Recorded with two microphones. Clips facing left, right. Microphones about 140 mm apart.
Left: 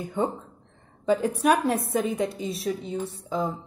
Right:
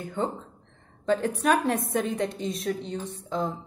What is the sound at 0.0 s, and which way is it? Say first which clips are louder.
A woman's voice: left 2 dB; 10° left (ahead or behind).